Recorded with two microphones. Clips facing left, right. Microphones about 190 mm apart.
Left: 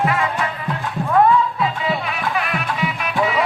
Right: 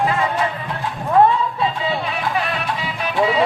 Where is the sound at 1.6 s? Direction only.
30° right (ahead or behind).